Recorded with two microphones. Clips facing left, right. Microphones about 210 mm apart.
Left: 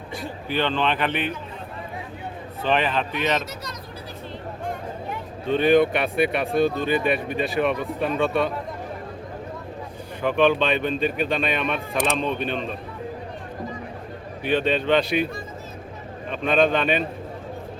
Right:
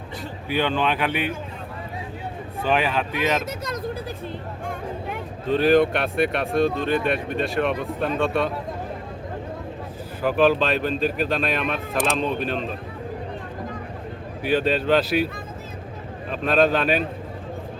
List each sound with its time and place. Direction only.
0.4 s speech: 10° right (ahead or behind)
2.6 s speech: 10° right (ahead or behind)
3.4 s speech: 50° right (ahead or behind)
5.5 s speech: centre (ahead or behind)
10.2 s speech: 5° right (ahead or behind)
14.4 s speech: 5° right (ahead or behind)
16.3 s speech: centre (ahead or behind)